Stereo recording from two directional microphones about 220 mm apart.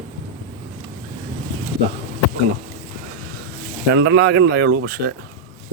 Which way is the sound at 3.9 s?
50° right (ahead or behind).